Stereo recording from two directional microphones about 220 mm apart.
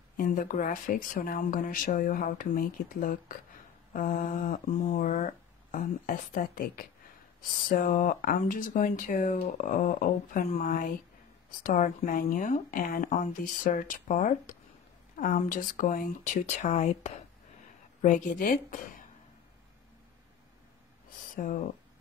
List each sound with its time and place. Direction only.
0.2 s speech: 35° left (ahead or behind)